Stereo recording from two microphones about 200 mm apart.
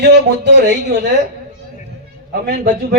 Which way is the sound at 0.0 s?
55° right (ahead or behind).